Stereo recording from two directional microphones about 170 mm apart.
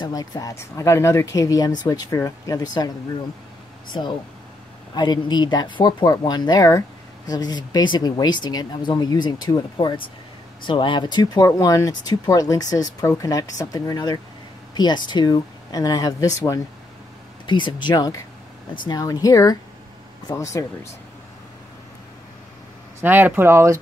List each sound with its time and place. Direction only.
0.0 s speech: 25° left (ahead or behind)
4.9 s speech: 25° left (ahead or behind)
14.7 s a sound: 25° left (ahead or behind)
15.0 s speech: 25° left (ahead or behind)
22.9 s speech: 10° right (ahead or behind)